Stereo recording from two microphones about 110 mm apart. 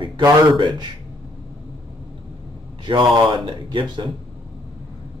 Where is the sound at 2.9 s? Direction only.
45° right (ahead or behind).